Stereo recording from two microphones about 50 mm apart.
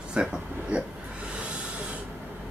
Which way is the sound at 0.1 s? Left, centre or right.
Centre.